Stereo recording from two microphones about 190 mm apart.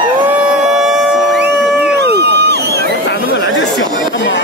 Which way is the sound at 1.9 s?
60° right (ahead or behind).